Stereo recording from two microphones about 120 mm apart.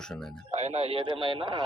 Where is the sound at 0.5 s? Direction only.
70° right (ahead or behind); by 1.6 s 45° right (ahead or behind).